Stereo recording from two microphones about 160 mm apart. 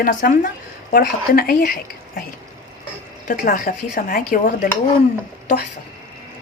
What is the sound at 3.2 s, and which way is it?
Speech, 60° left (ahead or behind).